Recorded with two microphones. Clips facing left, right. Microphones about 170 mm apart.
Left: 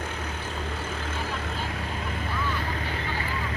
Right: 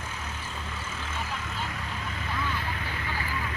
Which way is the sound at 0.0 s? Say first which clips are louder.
Left 5 dB; 60° left (ahead or behind).